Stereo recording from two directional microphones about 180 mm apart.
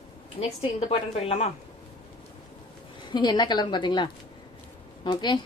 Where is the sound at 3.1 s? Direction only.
25° left (ahead or behind).